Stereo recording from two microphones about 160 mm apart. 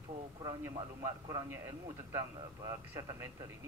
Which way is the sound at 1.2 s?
20° right (ahead or behind).